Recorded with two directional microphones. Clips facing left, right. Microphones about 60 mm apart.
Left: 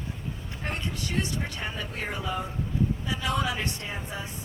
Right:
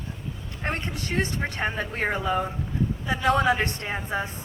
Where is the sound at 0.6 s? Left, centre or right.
Right.